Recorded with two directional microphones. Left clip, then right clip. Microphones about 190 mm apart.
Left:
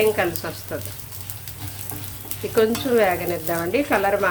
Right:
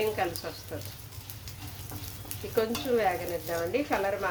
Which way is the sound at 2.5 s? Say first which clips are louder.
Left 9 dB; 25° left (ahead or behind).